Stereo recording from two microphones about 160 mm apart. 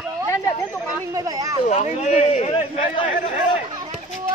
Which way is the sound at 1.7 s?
45° left (ahead or behind).